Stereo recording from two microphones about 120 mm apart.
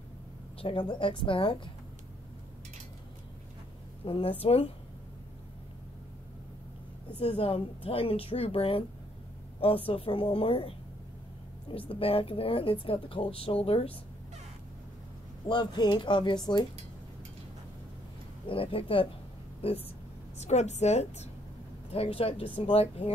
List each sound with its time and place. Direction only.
0.6 s a woman's voice: 45° left (ahead or behind)
4.0 s a woman's voice: 50° left (ahead or behind)
7.2 s a woman's voice: 55° left (ahead or behind)
11.9 s a woman's voice: 50° left (ahead or behind)
15.4 s speech: 40° left (ahead or behind)
18.5 s a woman's voice: 50° left (ahead or behind)
20.3 s a woman's voice: 70° left (ahead or behind)
21.9 s speech: 55° left (ahead or behind)